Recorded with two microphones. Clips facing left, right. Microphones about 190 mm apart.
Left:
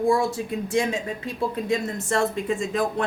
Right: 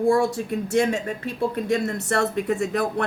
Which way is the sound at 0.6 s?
65° right (ahead or behind).